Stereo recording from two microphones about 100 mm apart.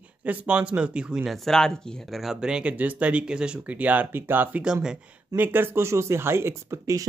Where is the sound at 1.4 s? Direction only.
5° left (ahead or behind); by 4.6 s 20° right (ahead or behind).